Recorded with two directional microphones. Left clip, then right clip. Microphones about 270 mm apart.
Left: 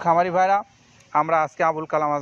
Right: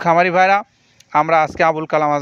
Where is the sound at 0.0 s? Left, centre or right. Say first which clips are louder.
Right 6 dB; right.